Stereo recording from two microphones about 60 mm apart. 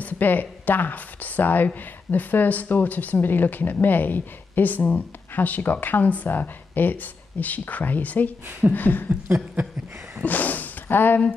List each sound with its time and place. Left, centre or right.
0.0 s speech: left
8.5 s speech: right
8.7 s speech: left
10.2 s speech: left